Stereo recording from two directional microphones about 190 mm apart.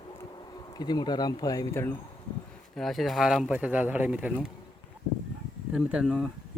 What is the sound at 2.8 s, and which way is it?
Speech, centre (ahead or behind).